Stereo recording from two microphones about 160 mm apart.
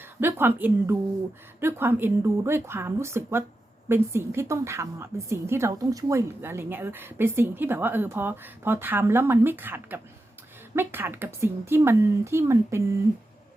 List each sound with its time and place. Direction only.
0.2 s a woman's voice: 15° right (ahead or behind)